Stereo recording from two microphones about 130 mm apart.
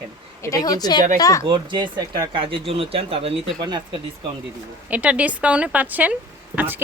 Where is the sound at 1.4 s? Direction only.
35° right (ahead or behind).